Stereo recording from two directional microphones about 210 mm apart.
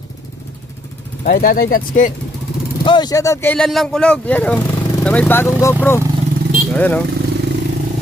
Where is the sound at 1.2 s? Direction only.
40° left (ahead or behind).